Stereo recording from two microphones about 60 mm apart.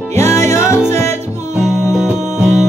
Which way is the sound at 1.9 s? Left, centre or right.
Centre.